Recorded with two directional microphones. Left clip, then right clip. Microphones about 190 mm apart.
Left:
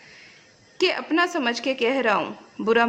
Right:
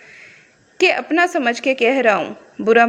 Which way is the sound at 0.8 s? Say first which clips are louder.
Right 6 dB; 20° right (ahead or behind).